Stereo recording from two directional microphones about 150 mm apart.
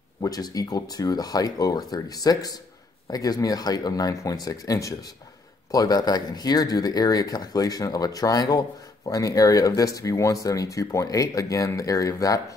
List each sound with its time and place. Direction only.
0.2 s speech: 25° left (ahead or behind)